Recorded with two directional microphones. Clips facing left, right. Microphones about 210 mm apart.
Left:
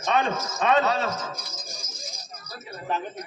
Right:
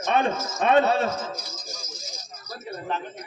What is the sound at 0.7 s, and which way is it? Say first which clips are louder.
Speech: right 3 dB; 30° right (ahead or behind).